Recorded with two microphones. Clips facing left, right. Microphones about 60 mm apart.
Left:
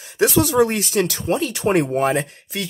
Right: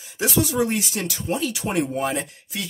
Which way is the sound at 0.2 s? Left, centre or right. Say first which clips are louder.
Left 6 dB; left.